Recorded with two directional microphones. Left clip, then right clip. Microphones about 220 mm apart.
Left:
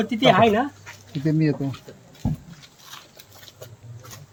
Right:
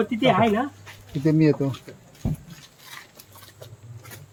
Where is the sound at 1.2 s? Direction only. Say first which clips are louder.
Right 3 dB; 30° right (ahead or behind).